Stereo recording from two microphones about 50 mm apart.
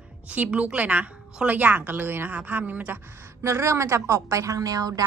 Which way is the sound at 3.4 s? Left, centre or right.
Right.